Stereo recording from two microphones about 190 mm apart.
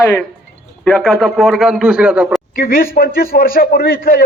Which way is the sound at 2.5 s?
50° left (ahead or behind).